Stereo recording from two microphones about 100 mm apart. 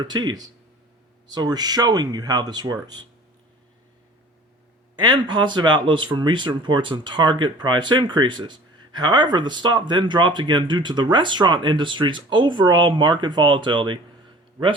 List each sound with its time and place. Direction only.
0.0 s speech: 45° right (ahead or behind)
4.9 s speech: 45° right (ahead or behind)